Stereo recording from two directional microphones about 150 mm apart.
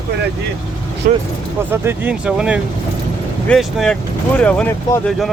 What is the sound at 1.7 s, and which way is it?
Speech, 15° right (ahead or behind).